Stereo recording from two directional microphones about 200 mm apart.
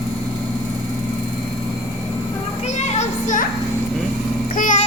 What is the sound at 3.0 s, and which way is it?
Children playing, 40° left (ahead or behind).